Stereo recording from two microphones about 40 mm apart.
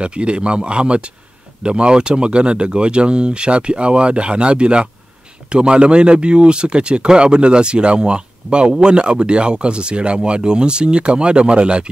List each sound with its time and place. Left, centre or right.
0.0 s speech: right